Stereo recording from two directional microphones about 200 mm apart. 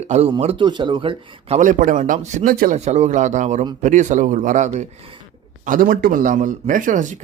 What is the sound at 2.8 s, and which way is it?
Speech, 35° right (ahead or behind).